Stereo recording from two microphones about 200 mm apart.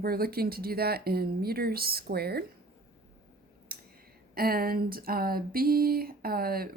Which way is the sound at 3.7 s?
45° right (ahead or behind).